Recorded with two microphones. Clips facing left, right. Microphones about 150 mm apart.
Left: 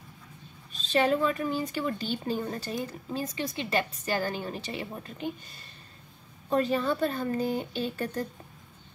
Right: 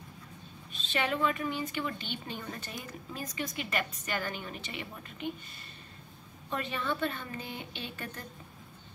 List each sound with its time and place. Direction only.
0.7 s a woman's voice: 35° left (ahead or behind)
6.5 s a woman's voice: 35° left (ahead or behind)